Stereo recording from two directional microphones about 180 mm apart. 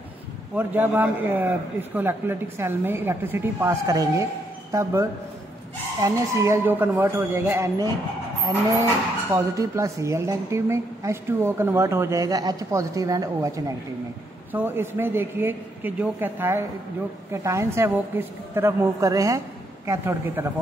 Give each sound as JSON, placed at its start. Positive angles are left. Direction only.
{"t": 0.6, "sound": "speech", "side_deg": -10}
{"t": 6.0, "sound": "speech", "side_deg": -15}
{"t": 9.3, "sound": "speech", "side_deg": -15}